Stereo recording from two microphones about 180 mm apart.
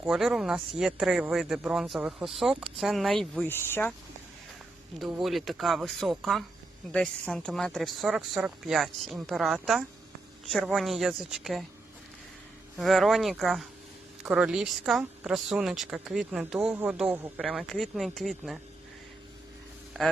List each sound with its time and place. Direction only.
0.0 s speech: 5° right (ahead or behind)
5.2 s speech: centre (ahead or behind)
12.7 s speech: centre (ahead or behind)
19.9 s speech: centre (ahead or behind)